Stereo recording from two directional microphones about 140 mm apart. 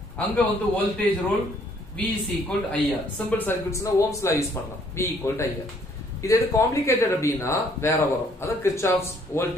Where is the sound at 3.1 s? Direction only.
15° left (ahead or behind).